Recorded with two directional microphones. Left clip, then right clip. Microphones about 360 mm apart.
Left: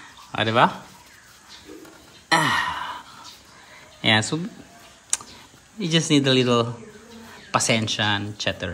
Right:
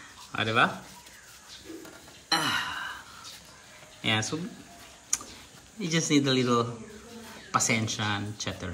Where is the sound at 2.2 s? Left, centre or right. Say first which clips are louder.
Left 7 dB; left.